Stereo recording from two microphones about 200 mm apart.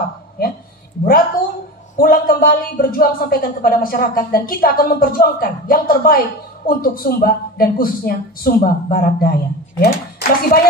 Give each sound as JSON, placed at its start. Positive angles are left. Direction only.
{"t": 2.0, "sound": "a woman's voice", "side_deg": 45}